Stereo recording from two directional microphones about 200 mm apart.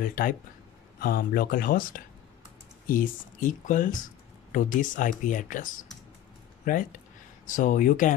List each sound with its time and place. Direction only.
0.0 s speech: 45° left (ahead or behind)